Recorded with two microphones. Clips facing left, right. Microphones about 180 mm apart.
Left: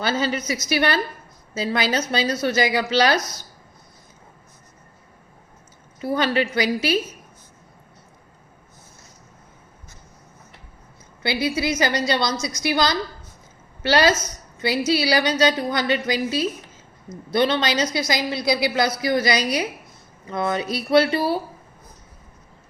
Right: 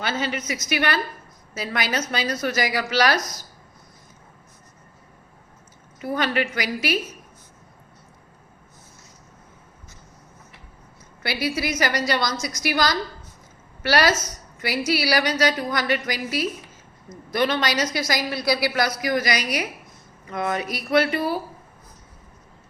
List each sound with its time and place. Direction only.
0.0 s a woman's voice: 35° left (ahead or behind)
6.0 s a woman's voice: 30° left (ahead or behind)
11.2 s a woman's voice: 25° left (ahead or behind)